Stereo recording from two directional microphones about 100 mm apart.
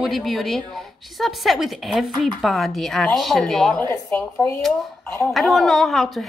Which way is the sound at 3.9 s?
25° left (ahead or behind).